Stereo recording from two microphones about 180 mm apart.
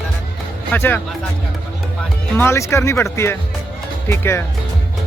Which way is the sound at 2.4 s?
15° left (ahead or behind).